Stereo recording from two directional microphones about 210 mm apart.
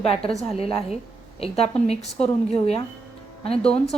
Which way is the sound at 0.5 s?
30° left (ahead or behind).